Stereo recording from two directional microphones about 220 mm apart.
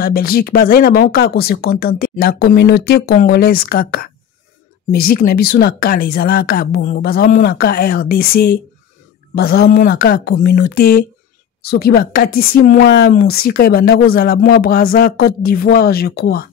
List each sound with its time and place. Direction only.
0.0 s speech: 45° left (ahead or behind)